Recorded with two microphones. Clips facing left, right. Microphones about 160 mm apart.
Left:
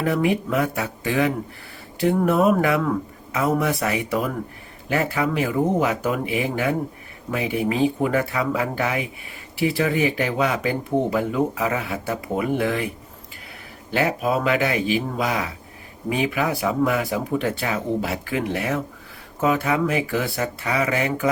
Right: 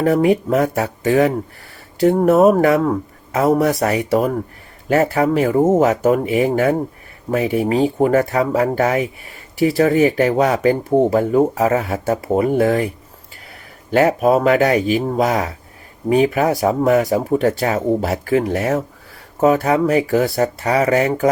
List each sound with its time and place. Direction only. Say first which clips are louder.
0.0 s speech: right 7 dB; 40° right (ahead or behind)
13.9 s speech: right 8 dB; 45° right (ahead or behind)